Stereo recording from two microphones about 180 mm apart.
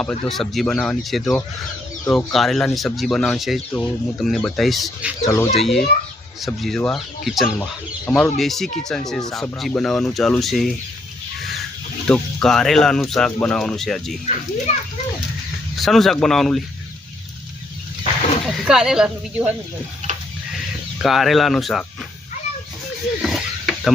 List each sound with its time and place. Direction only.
0.0 s speech: 5° left (ahead or behind)
5.2 s speech: 15° left (ahead or behind)
5.5 s speech: centre (ahead or behind)
12.0 s speech: 5° left (ahead or behind)
14.7 s a child's voice: 35° left (ahead or behind)
15.7 s speech: centre (ahead or behind)
18.5 s speech: 5° right (ahead or behind)
21.0 s speech: centre (ahead or behind)
23.2 s mechanisms: centre (ahead or behind)